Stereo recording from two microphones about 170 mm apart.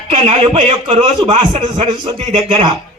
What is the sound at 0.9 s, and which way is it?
A man's voice, 25° right (ahead or behind).